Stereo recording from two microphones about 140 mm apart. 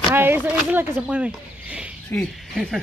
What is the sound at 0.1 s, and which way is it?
Speech, 15° right (ahead or behind).